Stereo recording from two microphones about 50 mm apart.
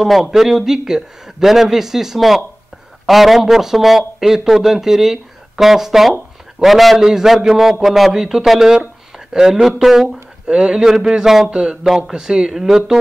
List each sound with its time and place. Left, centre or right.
0.0 s a man's voice: centre
10.4 s a man's voice: centre